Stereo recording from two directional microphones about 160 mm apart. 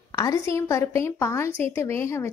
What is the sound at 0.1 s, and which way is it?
A woman's voice, 20° left (ahead or behind).